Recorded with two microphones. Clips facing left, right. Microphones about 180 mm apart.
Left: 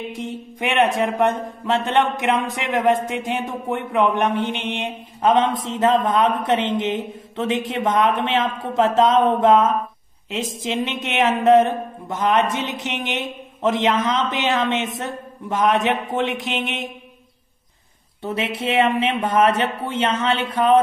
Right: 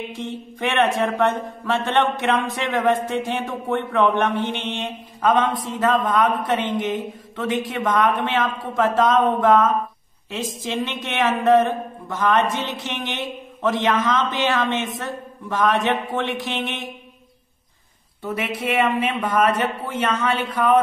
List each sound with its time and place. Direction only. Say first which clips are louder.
0.1 s a man's voice: left 1 dB; 15° left (ahead or behind)
18.2 s a man's voice: left 1 dB; 25° left (ahead or behind)